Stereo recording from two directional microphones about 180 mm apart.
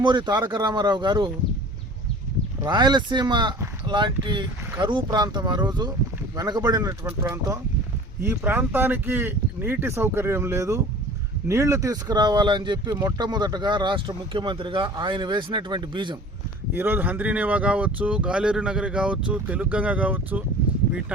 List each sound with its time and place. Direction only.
0.0 s speech: 25° right (ahead or behind)
2.6 s speech: 25° right (ahead or behind)
16.7 s speech: 10° right (ahead or behind)